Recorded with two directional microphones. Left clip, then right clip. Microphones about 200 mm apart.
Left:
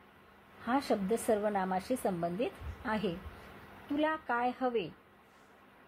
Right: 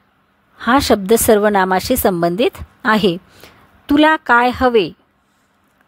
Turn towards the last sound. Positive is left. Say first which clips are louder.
# right 19 dB
turn(degrees=-50)  # may be behind; listen again after turning